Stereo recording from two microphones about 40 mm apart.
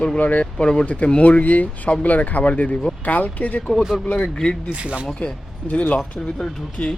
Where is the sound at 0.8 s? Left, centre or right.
Left.